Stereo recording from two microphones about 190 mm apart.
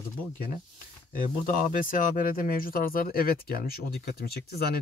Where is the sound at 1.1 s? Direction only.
45° left (ahead or behind).